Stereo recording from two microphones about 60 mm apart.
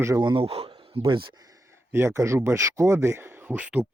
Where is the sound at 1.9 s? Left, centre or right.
Right.